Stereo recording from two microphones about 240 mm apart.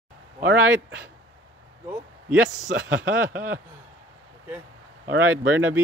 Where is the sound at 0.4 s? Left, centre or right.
Right.